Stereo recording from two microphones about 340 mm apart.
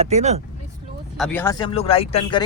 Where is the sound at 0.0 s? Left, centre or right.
Centre.